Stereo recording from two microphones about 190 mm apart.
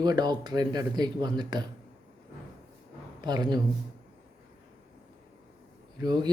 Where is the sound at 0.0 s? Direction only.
20° right (ahead or behind).